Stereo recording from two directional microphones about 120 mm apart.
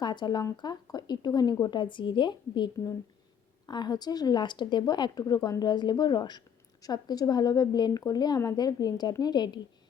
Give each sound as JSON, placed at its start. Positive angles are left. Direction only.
{"t": 0.0, "sound": "a woman's voice", "side_deg": 35}
{"t": 3.7, "sound": "a woman's voice", "side_deg": 35}